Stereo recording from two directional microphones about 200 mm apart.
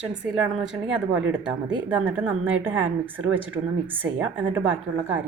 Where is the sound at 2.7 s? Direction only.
80° right.